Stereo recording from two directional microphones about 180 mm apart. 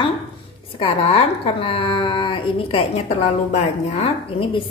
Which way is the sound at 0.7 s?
30° left (ahead or behind).